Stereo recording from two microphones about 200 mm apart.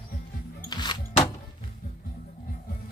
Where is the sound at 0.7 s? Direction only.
20° left (ahead or behind).